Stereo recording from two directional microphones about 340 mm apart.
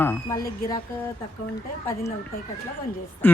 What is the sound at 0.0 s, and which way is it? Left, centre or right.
Speech, centre.